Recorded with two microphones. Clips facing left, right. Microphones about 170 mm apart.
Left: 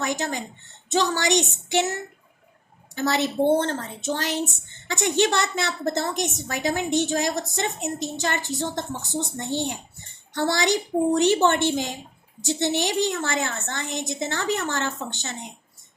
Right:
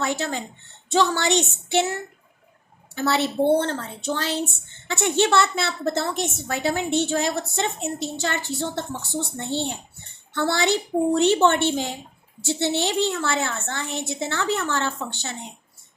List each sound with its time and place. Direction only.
0.0 s a woman's voice: 15° left (ahead or behind)
2.9 s a woman's voice: 15° left (ahead or behind)